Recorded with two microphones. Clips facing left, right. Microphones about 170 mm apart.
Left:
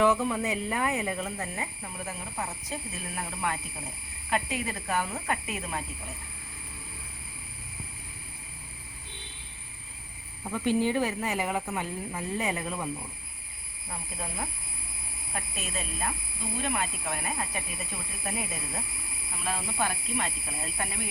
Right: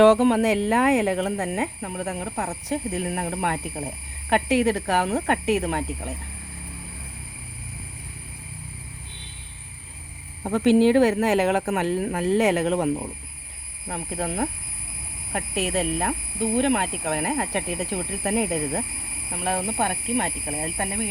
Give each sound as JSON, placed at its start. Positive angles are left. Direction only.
{"t": 0.0, "sound": "speech", "side_deg": -80}
{"t": 10.4, "sound": "speech", "side_deg": -90}
{"t": 13.8, "sound": "speech", "side_deg": -60}